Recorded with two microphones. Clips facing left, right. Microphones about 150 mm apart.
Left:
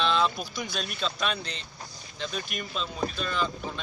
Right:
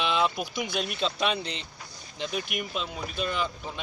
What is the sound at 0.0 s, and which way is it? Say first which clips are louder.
Speech: left 1 dB; 15° right (ahead or behind).